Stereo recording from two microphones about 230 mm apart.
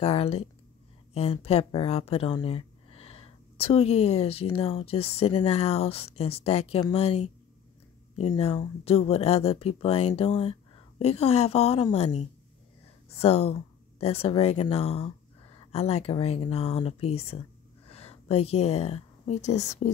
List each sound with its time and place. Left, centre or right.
0.0 s speech: left